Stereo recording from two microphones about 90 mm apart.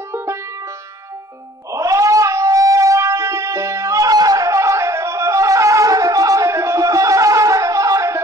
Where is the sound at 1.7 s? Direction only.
35° right (ahead or behind).